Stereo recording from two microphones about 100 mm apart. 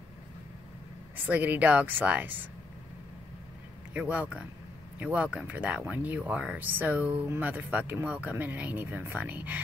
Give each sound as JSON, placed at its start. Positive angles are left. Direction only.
{"t": 1.1, "sound": "speech", "side_deg": -15}
{"t": 3.9, "sound": "speech", "side_deg": -15}